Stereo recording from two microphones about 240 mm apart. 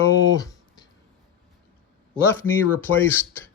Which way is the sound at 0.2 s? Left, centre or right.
Centre.